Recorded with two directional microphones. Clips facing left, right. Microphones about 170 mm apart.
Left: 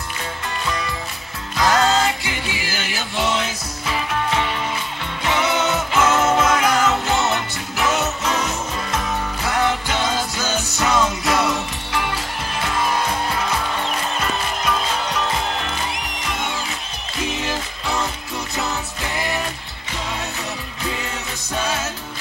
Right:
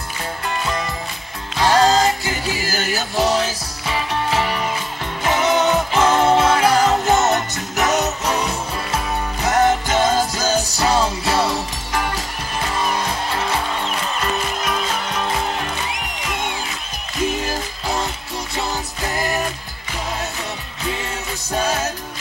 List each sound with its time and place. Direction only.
1.6 s music: 35° right (ahead or behind)
5.3 s music: 40° right (ahead or behind)
18.6 s music: 35° right (ahead or behind)